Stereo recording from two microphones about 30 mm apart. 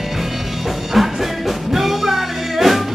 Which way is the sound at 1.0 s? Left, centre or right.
Centre.